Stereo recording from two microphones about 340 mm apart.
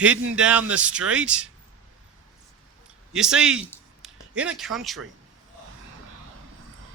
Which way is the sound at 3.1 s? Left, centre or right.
Centre.